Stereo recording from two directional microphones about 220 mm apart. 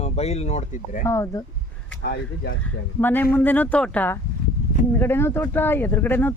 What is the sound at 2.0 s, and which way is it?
Speech, 50° left (ahead or behind).